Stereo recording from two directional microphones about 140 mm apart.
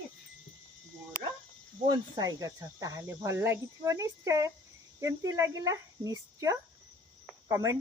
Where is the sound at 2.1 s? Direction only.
25° right (ahead or behind).